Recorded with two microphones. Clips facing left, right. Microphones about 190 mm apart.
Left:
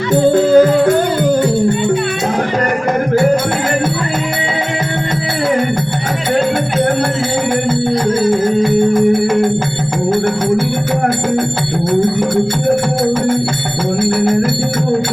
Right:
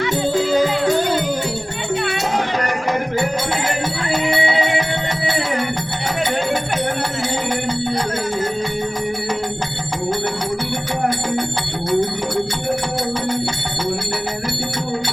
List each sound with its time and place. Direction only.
0.1 s music: 55° left (ahead or behind)
8.3 s music: 50° left (ahead or behind)